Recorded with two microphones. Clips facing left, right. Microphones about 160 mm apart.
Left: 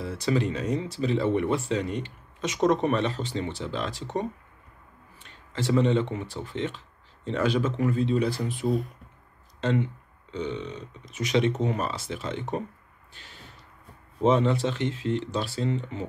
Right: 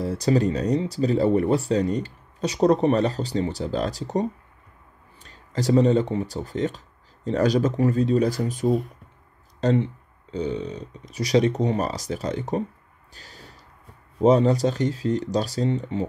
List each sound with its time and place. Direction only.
0.0 s speech: 40° right (ahead or behind)
13.1 s a sound: 40° right (ahead or behind)
14.2 s speech: 40° right (ahead or behind)